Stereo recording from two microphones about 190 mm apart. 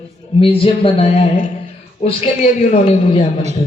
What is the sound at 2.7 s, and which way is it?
Speech, 30° left (ahead or behind).